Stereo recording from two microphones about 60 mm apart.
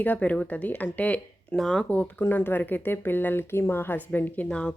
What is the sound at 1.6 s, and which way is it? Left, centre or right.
Speech, centre.